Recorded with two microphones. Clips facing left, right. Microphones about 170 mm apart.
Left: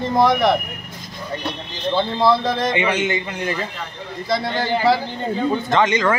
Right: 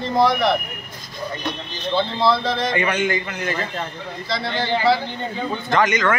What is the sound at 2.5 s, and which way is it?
Speech, 45° left (ahead or behind).